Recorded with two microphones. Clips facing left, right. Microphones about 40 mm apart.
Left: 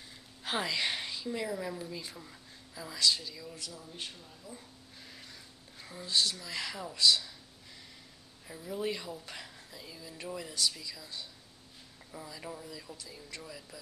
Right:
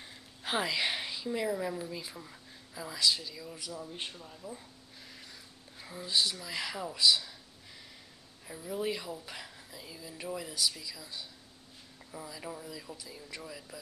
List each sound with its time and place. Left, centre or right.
0.4 s a woman's voice: centre
3.8 s speech: right
5.0 s a sound: centre
8.5 s speech: centre